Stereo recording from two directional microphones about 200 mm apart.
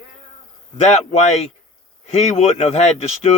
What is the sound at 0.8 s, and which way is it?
Speech, 35° left (ahead or behind).